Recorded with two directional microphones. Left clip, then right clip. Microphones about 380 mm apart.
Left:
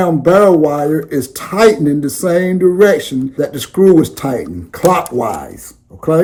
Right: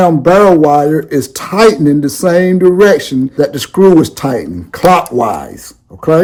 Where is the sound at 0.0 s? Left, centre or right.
Centre.